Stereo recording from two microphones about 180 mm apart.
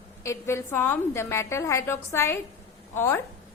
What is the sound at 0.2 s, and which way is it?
A woman's voice, 15° left (ahead or behind).